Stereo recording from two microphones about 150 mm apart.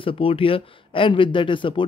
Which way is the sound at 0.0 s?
40° left (ahead or behind).